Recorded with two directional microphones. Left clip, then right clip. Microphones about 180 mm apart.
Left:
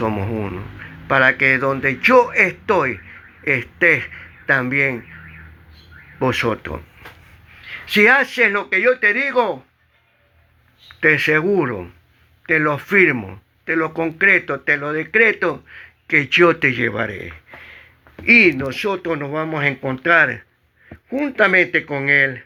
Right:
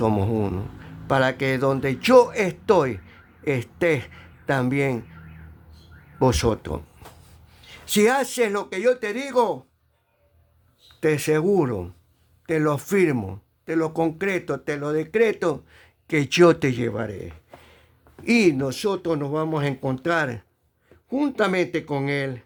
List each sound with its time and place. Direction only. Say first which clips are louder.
0.0 s a man's voice: left 1 dB; 15° right (ahead or behind)
1.0 s speech: left 7 dB; 55° right (ahead or behind)
6.1 s speech: left 2 dB; 60° right (ahead or behind)
11.0 s speech: left 6 dB; 40° right (ahead or behind)
16.0 s speech: left 8 dB; 65° right (ahead or behind)
16.5 s speech: left 4 dB; 55° right (ahead or behind)
17.0 s speech: left 7 dB; 35° right (ahead or behind)
18.3 s speech: left 8 dB; 50° right (ahead or behind)